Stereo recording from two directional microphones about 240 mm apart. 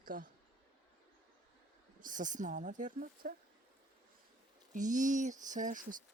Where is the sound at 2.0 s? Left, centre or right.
Right.